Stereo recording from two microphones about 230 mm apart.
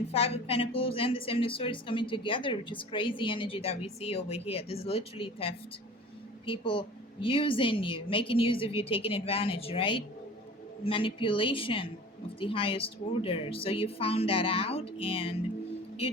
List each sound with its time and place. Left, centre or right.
0.1 s a woman's voice: left